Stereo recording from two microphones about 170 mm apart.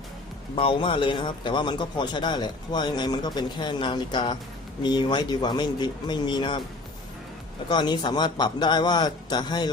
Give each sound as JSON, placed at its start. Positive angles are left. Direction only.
{"t": 0.5, "sound": "speech", "side_deg": 30}
{"t": 7.7, "sound": "speech", "side_deg": 25}